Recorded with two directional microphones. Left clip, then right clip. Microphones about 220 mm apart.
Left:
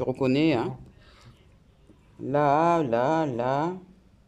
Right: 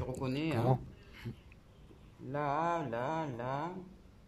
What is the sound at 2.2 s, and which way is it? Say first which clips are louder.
Speech: left 12 dB; 45° left (ahead or behind).